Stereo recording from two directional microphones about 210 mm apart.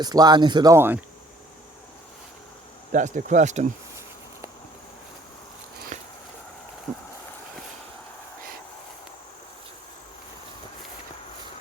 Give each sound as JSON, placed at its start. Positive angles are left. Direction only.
{"t": 0.0, "sound": "speech", "side_deg": -20}
{"t": 2.9, "sound": "speech", "side_deg": -35}
{"t": 5.9, "sound": "a sound", "side_deg": -35}